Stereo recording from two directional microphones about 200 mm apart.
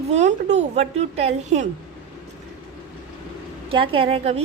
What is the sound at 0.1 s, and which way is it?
A woman's voice, 35° right (ahead or behind).